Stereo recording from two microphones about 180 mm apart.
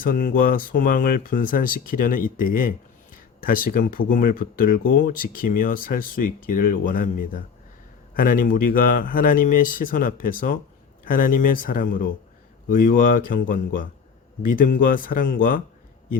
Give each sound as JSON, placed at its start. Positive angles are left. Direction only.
{"t": 0.0, "sound": "speech", "side_deg": 50}